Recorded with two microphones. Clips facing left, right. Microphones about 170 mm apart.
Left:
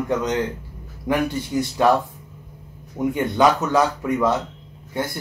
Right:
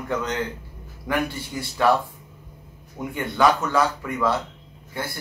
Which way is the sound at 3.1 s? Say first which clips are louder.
Left 2 dB; 20° left (ahead or behind).